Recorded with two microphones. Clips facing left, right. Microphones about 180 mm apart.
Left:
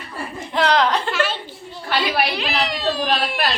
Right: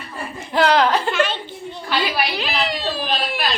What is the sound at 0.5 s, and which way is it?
Speech, 5° right (ahead or behind).